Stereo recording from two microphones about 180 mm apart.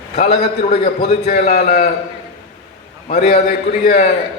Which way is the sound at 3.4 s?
60° left (ahead or behind).